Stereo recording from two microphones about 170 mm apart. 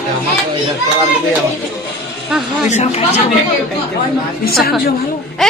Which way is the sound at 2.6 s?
40° left (ahead or behind).